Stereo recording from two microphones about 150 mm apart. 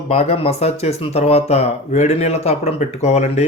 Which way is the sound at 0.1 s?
40° left (ahead or behind).